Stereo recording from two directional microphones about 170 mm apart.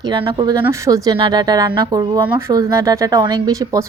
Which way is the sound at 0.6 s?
20° right (ahead or behind).